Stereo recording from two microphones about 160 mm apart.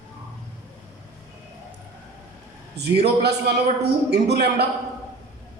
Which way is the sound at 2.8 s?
90° right.